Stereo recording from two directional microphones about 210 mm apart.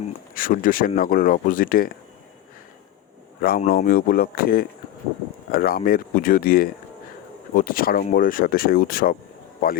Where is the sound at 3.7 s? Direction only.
45° left (ahead or behind).